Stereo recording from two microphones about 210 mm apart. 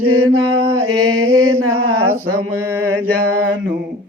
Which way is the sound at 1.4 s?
90° right.